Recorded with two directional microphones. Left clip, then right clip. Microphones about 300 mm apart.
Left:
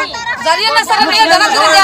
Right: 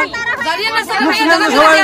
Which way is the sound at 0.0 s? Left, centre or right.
Centre.